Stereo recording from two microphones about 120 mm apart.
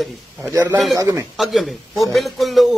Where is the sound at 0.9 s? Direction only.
25° right (ahead or behind).